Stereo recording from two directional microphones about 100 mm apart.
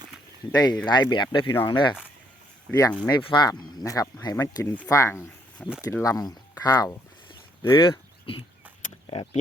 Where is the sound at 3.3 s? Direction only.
40° left (ahead or behind).